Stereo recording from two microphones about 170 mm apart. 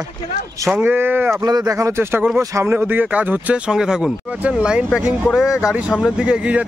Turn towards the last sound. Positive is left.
turn(degrees=-5)  # may be behind; listen again after turning